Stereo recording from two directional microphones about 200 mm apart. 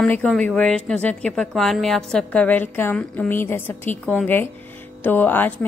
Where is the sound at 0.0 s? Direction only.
5° left (ahead or behind).